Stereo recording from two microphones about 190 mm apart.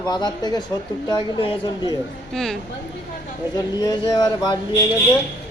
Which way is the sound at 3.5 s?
20° left (ahead or behind).